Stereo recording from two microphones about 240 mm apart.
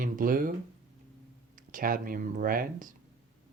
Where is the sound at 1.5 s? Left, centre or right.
Right.